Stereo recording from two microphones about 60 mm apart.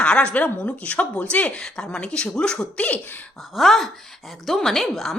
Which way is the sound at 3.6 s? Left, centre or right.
Centre.